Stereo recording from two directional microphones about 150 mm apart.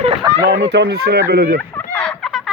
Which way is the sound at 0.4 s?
90° right.